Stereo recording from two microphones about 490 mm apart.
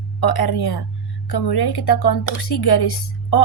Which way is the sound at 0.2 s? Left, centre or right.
Left.